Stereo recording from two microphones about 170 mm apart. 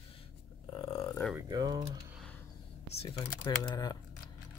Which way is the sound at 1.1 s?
5° left (ahead or behind).